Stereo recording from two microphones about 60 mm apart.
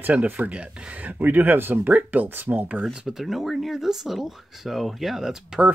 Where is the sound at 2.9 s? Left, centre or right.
Centre.